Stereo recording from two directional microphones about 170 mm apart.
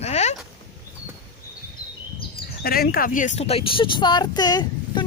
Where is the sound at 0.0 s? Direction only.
40° left (ahead or behind).